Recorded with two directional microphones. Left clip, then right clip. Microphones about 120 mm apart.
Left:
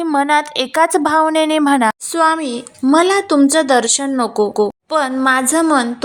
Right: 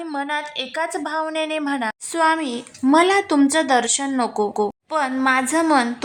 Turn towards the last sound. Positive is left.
turn(degrees=20)  # may be behind; listen again after turning